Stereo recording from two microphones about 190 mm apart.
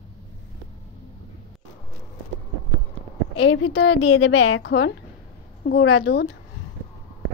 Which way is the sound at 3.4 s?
90° left.